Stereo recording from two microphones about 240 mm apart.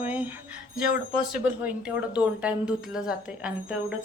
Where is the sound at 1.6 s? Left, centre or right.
Centre.